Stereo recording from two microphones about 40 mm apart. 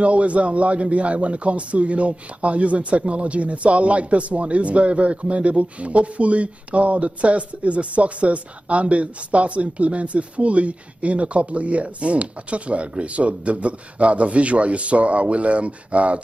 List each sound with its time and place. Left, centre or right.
0.0 s a man's voice: right